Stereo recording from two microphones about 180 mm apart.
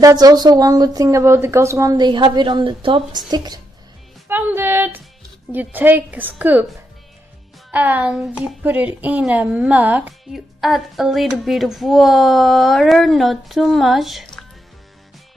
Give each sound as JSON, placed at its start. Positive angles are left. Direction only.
{"t": 0.0, "sound": "speech", "side_deg": -20}
{"t": 4.3, "sound": "music", "side_deg": -10}
{"t": 5.5, "sound": "a woman's voice", "side_deg": -10}
{"t": 7.7, "sound": "speech", "side_deg": -10}